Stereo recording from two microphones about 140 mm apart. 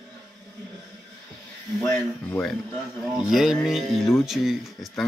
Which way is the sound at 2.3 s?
5° left (ahead or behind).